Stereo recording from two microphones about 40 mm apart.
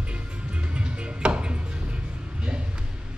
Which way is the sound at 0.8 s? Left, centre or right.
Right.